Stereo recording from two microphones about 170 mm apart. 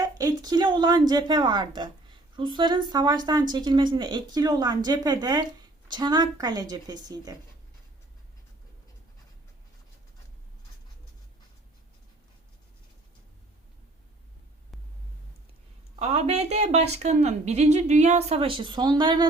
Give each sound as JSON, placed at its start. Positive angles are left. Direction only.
{"t": 0.0, "sound": "a woman's voice", "side_deg": -20}
{"t": 16.0, "sound": "a woman's voice", "side_deg": -40}